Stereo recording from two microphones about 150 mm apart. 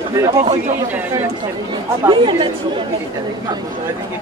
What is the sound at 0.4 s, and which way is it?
Speech, 55° right (ahead or behind).